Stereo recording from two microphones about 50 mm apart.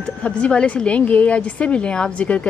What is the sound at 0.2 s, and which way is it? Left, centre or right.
A woman's voice, left.